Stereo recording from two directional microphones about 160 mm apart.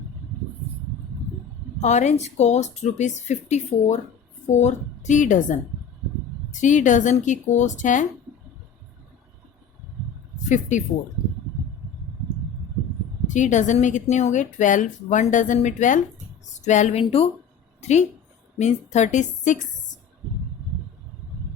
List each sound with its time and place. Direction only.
1.8 s a woman's voice: 45° left (ahead or behind)
6.6 s a woman's voice: 50° left (ahead or behind)
10.5 s a woman's voice: 50° left (ahead or behind)
13.2 s a woman's voice: 50° left (ahead or behind)
17.0 s speech: 35° left (ahead or behind)
17.7 s a sound: 45° left (ahead or behind)
18.6 s a woman's voice: 45° left (ahead or behind)